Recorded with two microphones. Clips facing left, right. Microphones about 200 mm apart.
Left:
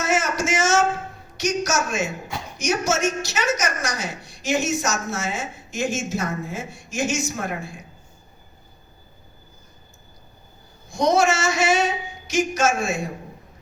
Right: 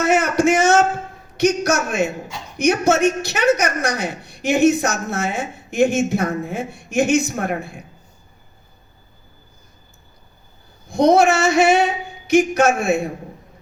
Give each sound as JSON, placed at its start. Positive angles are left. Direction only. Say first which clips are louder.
{"t": 0.0, "sound": "a woman's voice", "louder": "right 7 dB", "side_deg": -60}
{"t": 10.8, "sound": "a woman's voice", "louder": "right 5 dB", "side_deg": -60}